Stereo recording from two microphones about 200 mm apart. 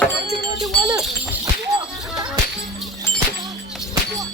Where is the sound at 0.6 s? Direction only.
Centre (ahead or behind).